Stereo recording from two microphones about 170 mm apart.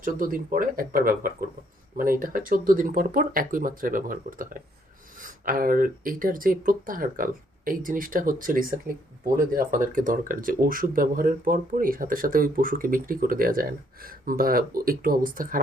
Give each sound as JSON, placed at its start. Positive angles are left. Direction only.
{"t": 0.0, "sound": "speech", "side_deg": -55}